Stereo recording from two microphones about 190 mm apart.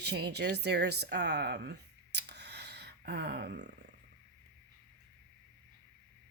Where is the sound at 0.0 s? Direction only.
60° right (ahead or behind).